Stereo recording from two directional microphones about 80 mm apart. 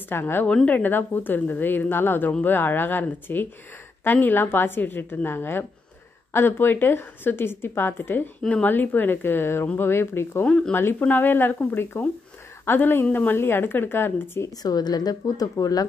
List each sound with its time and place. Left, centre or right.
0.1 s a woman's voice: left
8.4 s speech: centre
8.6 s a woman's voice: left
10.4 s speech: centre
10.7 s a woman's voice: left
14.6 s speech: left